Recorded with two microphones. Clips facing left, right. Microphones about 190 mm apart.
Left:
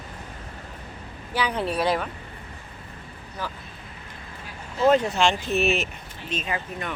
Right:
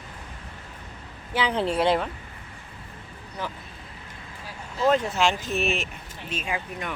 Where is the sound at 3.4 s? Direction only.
20° right (ahead or behind).